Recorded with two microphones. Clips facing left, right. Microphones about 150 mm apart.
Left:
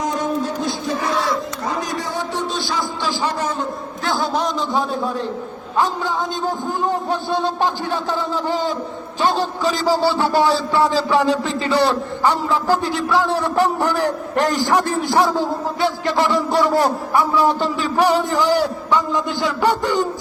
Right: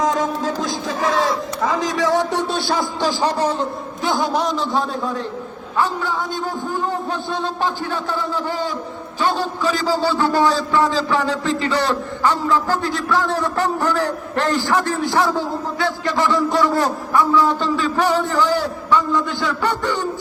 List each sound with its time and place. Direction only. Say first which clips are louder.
0.0 s a sound: right 2 dB; 90° right; by 3.7 s 35° right (ahead or behind)
4.1 s a man's voice: right 1 dB; 5° right (ahead or behind)
5.7 s a man's voice: left 1 dB; 15° left (ahead or behind)